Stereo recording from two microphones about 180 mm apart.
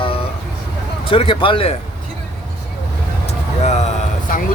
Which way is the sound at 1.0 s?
30° left (ahead or behind).